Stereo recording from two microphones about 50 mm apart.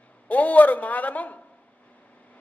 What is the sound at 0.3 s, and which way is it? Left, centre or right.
A man's voice, left.